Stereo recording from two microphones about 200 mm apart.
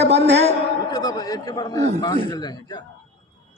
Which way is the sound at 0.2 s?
30° right (ahead or behind).